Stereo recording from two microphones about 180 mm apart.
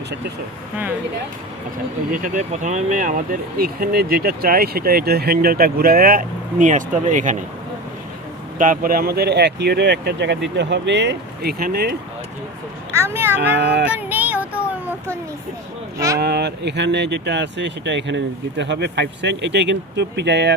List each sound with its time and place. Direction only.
2.1 s speech: 45° right (ahead or behind)
8.5 s speech: 50° right (ahead or behind)
12.9 s speech: 15° right (ahead or behind)
13.6 s speech: 75° right (ahead or behind)
13.9 s child singing: 10° right (ahead or behind)
14.7 s speech: 10° right (ahead or behind)
16.1 s speech: 65° right (ahead or behind)